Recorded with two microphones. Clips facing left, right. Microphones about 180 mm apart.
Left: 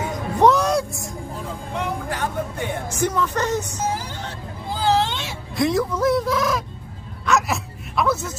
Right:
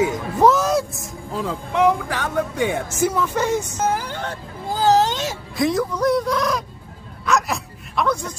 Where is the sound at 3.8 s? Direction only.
55° right (ahead or behind).